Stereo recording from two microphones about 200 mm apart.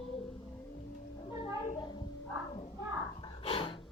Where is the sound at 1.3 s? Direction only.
30° left (ahead or behind).